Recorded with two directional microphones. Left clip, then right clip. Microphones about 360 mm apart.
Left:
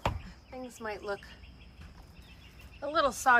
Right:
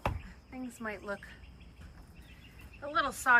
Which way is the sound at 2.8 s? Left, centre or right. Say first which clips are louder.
Left 4 dB; centre.